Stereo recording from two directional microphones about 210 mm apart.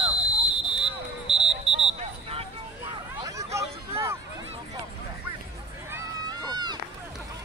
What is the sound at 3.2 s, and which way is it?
Hubbub, 15° right (ahead or behind).